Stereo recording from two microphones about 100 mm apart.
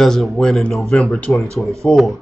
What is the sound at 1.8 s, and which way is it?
Speech, centre (ahead or behind).